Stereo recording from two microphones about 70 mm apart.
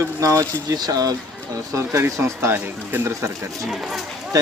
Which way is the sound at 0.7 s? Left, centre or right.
Right.